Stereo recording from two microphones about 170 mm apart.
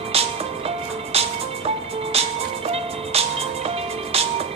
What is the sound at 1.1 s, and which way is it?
Music, 35° right (ahead or behind).